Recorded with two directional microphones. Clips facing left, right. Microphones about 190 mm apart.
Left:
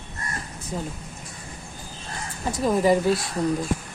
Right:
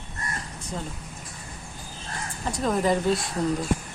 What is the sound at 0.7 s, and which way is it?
Speech, 10° left (ahead or behind).